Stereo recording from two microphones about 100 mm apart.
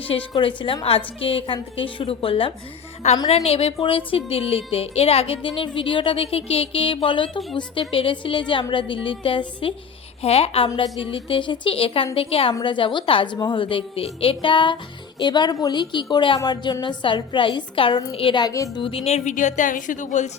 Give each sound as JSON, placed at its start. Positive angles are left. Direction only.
{"t": 0.3, "sound": "a woman's voice", "side_deg": 60}
{"t": 3.2, "sound": "a woman's voice", "side_deg": 90}
{"t": 10.2, "sound": "a woman's voice", "side_deg": 90}
{"t": 11.0, "sound": "a woman's voice", "side_deg": 60}
{"t": 12.6, "sound": "a woman's voice", "side_deg": 55}
{"t": 18.1, "sound": "a woman's voice", "side_deg": 70}
{"t": 18.5, "sound": "a woman's voice", "side_deg": 35}
{"t": 18.8, "sound": "a woman's voice", "side_deg": 65}